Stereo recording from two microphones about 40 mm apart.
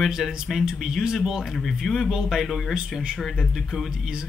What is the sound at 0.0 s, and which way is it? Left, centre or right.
Speech, centre.